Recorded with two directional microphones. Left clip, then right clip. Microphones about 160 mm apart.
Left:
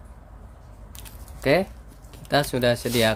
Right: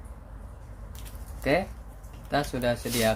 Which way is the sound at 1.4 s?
90° left.